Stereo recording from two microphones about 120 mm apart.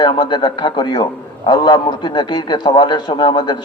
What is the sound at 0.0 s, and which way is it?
A man's voice, 40° left (ahead or behind).